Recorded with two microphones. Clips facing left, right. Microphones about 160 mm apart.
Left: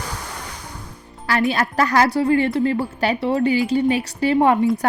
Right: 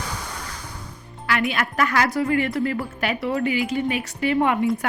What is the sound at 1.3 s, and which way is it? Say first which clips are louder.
A woman's voice: left 4 dB; 35° left (ahead or behind).